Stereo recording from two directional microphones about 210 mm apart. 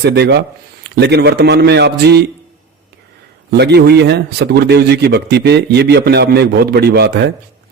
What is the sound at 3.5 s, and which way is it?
Speech, 50° right (ahead or behind).